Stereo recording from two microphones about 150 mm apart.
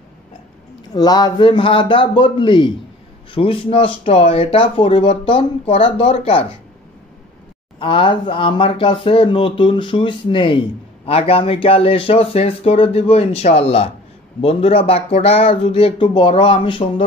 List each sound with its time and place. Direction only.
0.9 s speech: 25° left (ahead or behind)
7.8 s speech: 35° left (ahead or behind)